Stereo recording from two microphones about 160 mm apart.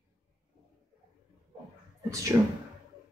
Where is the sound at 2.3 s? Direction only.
20° right (ahead or behind).